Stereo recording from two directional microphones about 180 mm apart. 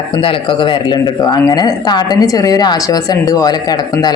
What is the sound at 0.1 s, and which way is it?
Speech, 30° left (ahead or behind).